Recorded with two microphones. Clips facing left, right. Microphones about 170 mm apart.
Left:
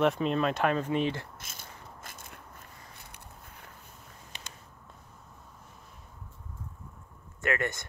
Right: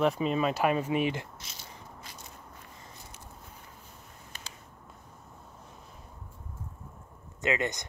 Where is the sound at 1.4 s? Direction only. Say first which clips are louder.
Even; 50° left (ahead or behind).